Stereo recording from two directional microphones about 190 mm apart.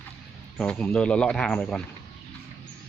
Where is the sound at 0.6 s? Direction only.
5° left (ahead or behind).